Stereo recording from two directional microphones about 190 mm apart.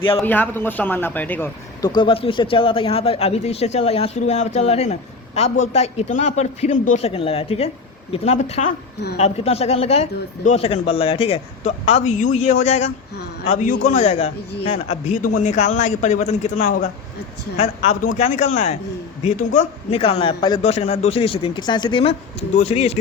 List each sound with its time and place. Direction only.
0.2 s speech: 10° left (ahead or behind)
1.8 s a man's voice: 25° left (ahead or behind)